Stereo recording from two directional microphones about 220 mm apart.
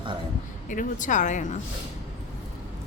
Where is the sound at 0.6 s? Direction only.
35° left (ahead or behind).